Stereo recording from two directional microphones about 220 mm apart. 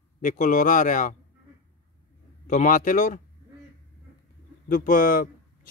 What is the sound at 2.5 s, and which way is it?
Speech, 35° left (ahead or behind).